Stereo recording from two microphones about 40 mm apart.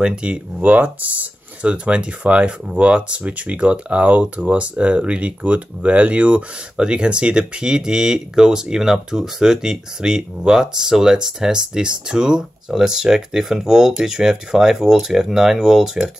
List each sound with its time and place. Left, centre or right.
0.0 s speech: right
0.6 s speech: right
6.8 s speech: right